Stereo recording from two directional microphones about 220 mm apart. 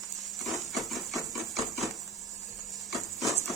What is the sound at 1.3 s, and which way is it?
Hammer, centre (ahead or behind).